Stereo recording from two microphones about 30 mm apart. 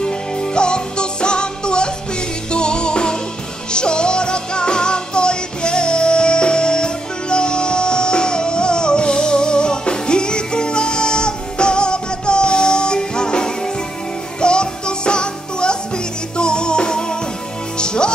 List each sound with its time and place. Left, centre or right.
0.0 s music: left